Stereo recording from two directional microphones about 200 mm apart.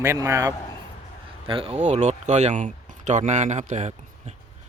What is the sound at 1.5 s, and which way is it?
Speech, 30° right (ahead or behind).